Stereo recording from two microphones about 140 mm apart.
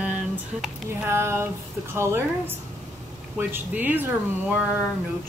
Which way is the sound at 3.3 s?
15° right (ahead or behind).